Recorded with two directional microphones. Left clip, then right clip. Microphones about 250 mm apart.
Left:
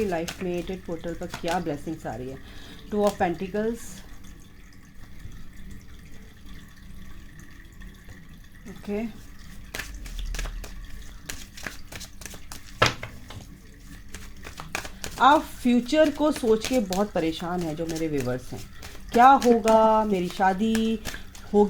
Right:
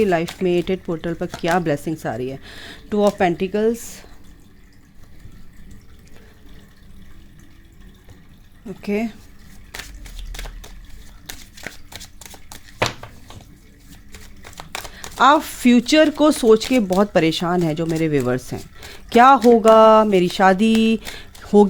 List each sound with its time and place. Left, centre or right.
0.0 s speech: right
8.8 s speech: right
11.3 s a sound: centre
15.2 s speech: right